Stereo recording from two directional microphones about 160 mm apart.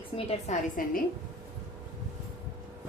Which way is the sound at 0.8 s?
60° left (ahead or behind).